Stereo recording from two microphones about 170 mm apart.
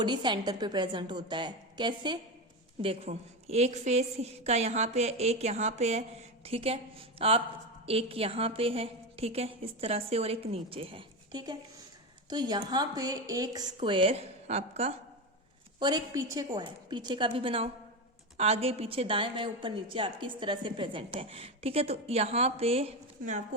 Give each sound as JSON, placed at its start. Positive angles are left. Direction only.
{"t": 0.0, "sound": "a woman's voice", "side_deg": -25}
{"t": 15.8, "sound": "a woman's voice", "side_deg": -20}